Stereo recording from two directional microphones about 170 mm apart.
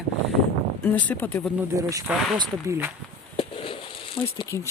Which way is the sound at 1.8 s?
20° right (ahead or behind).